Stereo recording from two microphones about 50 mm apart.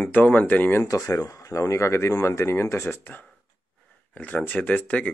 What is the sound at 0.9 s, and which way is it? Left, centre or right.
Speech, left.